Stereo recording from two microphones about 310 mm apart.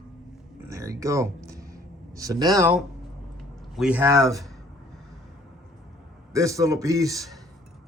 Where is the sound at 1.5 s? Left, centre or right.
Centre.